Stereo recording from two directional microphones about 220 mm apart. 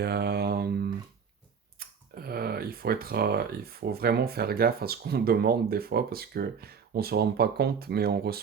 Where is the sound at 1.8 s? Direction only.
45° right (ahead or behind).